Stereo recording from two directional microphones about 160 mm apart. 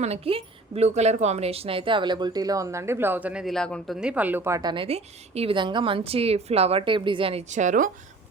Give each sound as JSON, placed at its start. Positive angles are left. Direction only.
{"t": 0.0, "sound": "a woman's voice", "side_deg": -40}
{"t": 4.7, "sound": "a woman's voice", "side_deg": -35}